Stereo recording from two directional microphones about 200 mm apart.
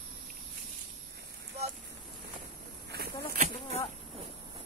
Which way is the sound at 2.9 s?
50° right (ahead or behind).